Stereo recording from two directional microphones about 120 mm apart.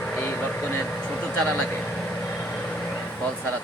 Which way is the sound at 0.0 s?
10° left (ahead or behind).